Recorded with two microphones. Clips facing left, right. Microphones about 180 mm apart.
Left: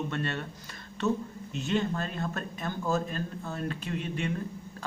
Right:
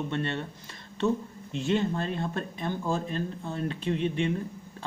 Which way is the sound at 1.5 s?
30° right (ahead or behind).